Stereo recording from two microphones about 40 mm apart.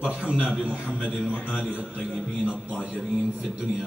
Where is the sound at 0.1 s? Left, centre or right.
Right.